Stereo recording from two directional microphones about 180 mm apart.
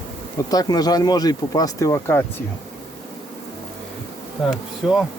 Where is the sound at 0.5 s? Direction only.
20° left (ahead or behind).